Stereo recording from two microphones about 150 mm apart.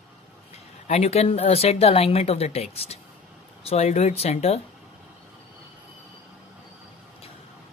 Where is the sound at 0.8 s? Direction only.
45° left (ahead or behind).